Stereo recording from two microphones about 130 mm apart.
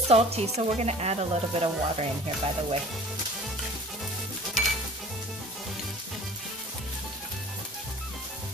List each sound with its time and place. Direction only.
0.1 s speech: 55° right (ahead or behind)
4.6 s music: centre (ahead or behind)